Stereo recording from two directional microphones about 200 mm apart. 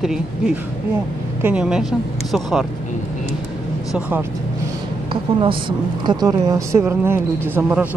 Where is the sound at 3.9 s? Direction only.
5° right (ahead or behind).